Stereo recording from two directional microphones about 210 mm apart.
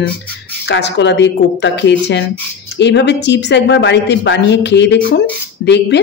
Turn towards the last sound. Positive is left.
turn(degrees=55)  # may be behind; listen again after turning